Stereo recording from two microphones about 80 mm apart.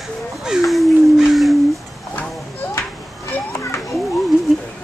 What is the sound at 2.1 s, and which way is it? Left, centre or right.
Children playing, left.